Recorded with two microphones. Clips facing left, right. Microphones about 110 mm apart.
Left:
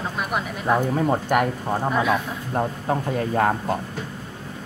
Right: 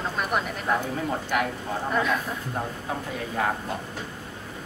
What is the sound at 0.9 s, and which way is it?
Speech, 45° left (ahead or behind).